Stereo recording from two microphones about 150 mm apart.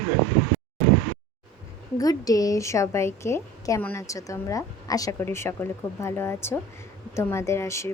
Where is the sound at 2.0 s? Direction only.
25° left (ahead or behind).